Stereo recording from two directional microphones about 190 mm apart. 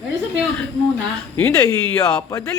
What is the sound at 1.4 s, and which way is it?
Speech, 15° left (ahead or behind).